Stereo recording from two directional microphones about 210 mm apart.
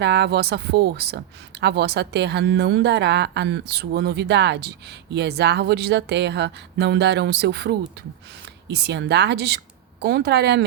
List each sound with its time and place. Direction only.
0.0 s a woman's voice: 50° right (ahead or behind)